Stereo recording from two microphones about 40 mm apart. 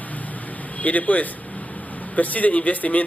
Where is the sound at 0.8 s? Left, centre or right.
Left.